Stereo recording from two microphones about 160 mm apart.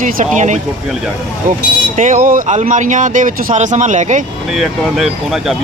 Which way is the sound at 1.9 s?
50° right (ahead or behind).